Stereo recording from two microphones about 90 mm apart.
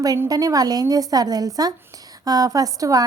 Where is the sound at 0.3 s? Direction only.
45° right (ahead or behind).